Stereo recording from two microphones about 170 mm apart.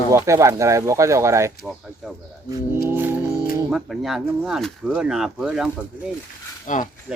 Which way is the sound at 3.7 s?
Centre (ahead or behind).